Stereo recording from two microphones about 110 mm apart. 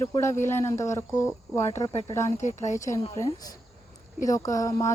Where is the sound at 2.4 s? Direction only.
90° left.